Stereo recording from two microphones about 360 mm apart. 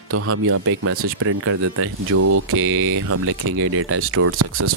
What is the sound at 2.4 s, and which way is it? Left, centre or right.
Speech, right.